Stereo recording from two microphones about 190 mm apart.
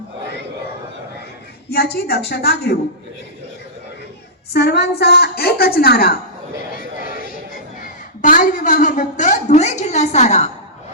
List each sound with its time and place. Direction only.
1.7 s a woman's voice: 55° left (ahead or behind)
4.5 s a woman's voice: 60° left (ahead or behind)
7.8 s a woman's voice: 45° left (ahead or behind)